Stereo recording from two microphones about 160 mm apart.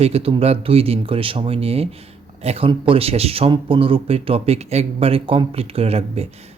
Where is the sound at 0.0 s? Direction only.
40° right (ahead or behind).